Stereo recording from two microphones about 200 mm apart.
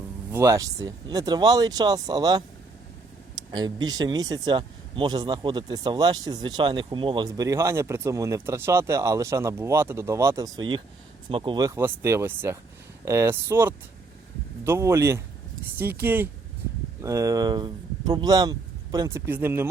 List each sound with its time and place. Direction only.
0.3 s speech: 15° right (ahead or behind)
3.5 s speech: 20° right (ahead or behind)